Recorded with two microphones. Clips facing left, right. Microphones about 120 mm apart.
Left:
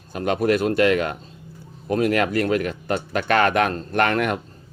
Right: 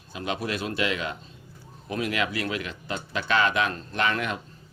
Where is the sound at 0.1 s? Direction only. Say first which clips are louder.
Left 10 dB; 50° left (ahead or behind).